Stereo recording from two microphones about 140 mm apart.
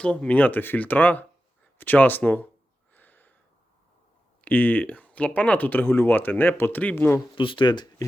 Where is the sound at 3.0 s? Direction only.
10° left (ahead or behind).